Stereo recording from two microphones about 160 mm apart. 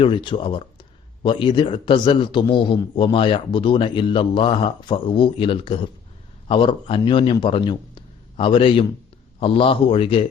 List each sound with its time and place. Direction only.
0.0 s a man's voice: 30° left (ahead or behind)